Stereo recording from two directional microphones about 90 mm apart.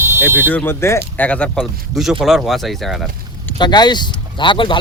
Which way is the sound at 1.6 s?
5° right (ahead or behind).